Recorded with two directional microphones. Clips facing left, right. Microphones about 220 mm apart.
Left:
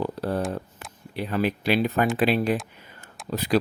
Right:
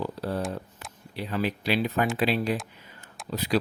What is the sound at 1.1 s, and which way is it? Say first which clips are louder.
Speech: left 4 dB; 55° left (ahead or behind).